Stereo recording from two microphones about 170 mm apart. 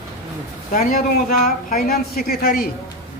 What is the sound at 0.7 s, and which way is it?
Speech, 55° left (ahead or behind).